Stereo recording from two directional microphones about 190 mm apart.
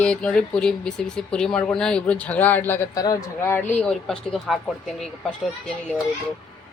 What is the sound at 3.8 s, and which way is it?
Speech, centre (ahead or behind).